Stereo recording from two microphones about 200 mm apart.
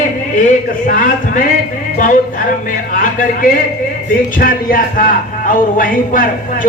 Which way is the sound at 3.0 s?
45° left (ahead or behind).